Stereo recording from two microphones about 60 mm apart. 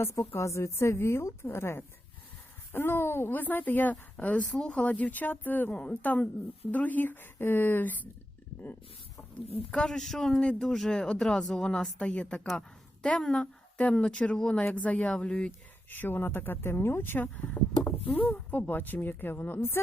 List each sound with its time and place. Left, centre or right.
0.0 s a woman's voice: left
9.7 s a woman's voice: centre
15.9 s speech: left
17.8 s a sound: left
18.3 s speech: left